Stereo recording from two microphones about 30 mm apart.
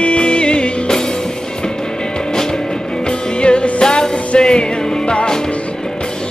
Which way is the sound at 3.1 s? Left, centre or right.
Left.